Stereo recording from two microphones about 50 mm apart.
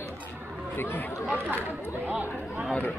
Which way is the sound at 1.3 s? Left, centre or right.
Right.